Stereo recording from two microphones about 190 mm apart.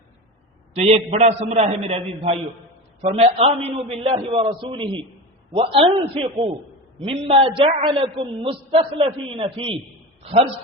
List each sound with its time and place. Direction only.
0.7 s a man's voice: 35° right (ahead or behind)